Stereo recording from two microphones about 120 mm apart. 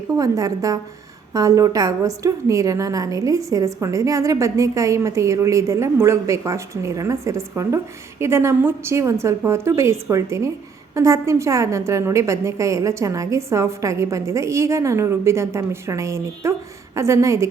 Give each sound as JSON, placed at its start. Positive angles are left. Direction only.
{"t": 0.2, "sound": "a woman's voice", "side_deg": -30}